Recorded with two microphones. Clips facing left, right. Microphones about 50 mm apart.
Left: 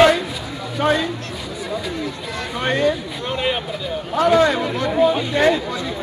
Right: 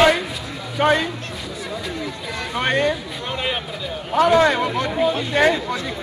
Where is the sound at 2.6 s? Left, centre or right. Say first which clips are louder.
Left 1 dB; right.